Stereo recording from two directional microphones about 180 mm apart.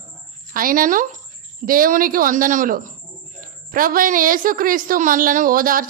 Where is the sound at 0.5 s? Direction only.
50° right (ahead or behind).